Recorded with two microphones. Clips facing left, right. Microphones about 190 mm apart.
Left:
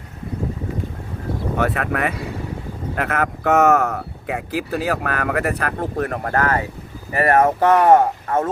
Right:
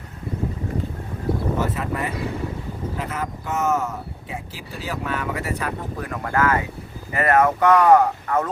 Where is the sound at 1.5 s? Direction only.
70° left (ahead or behind).